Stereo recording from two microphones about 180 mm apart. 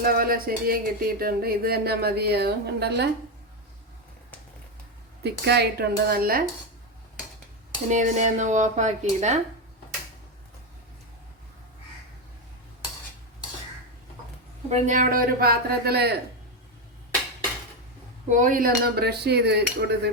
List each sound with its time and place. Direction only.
0.0 s speech: 55° right (ahead or behind)
5.2 s speech: 65° right (ahead or behind)
7.9 s speech: 40° right (ahead or behind)
14.7 s a man's voice: 45° right (ahead or behind); by 16.1 s 65° right (ahead or behind)
18.3 s speech: 45° right (ahead or behind); by 20.0 s 65° right (ahead or behind)